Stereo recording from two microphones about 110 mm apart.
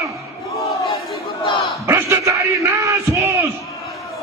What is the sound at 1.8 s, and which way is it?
Speech, 25° right (ahead or behind).